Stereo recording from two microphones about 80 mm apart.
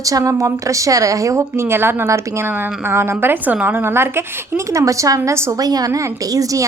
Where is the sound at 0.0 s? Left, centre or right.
Right.